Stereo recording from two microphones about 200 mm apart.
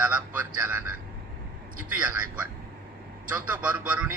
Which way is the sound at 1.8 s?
5° right (ahead or behind).